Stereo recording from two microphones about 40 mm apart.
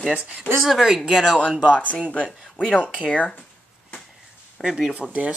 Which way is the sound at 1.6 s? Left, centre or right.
Left.